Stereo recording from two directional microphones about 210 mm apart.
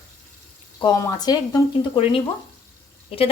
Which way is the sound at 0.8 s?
20° left (ahead or behind).